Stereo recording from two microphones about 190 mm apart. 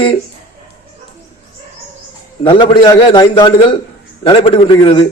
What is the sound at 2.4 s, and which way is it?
A man's voice, 25° left (ahead or behind).